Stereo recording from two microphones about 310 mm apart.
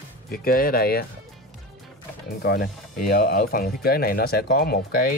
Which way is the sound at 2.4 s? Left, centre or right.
Left.